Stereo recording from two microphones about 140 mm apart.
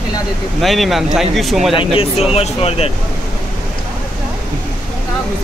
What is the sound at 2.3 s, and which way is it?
Speech, 45° left (ahead or behind).